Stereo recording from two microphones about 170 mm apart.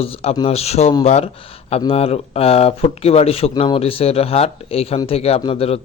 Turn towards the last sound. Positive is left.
turn(degrees=35)  # may be behind; listen again after turning